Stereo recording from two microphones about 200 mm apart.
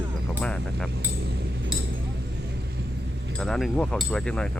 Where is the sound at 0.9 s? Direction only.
55° right (ahead or behind).